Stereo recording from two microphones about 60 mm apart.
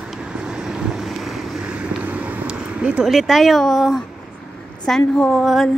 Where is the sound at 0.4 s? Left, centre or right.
Centre.